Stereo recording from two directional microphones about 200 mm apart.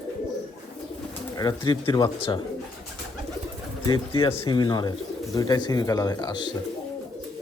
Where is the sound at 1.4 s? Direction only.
20° left (ahead or behind).